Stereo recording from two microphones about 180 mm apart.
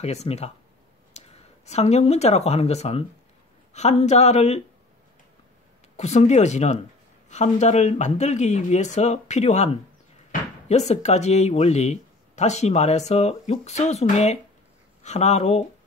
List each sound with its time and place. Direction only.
0.0 s speech: 35° left (ahead or behind)
5.9 s speech: 40° left (ahead or behind)
10.7 s speech: 40° left (ahead or behind)